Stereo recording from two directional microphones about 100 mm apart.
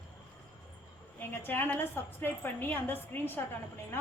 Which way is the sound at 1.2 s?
20° left (ahead or behind).